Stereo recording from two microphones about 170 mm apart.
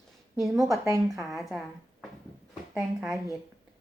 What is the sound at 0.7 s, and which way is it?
Speech, 20° right (ahead or behind).